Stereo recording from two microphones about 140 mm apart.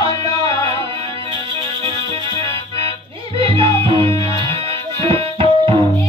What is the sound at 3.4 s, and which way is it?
Music, 40° right (ahead or behind).